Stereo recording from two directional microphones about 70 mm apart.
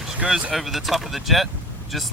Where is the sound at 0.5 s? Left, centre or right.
Centre.